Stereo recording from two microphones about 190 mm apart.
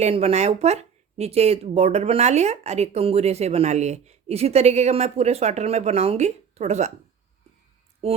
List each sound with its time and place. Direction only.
0.0 s speech: 35° right (ahead or behind)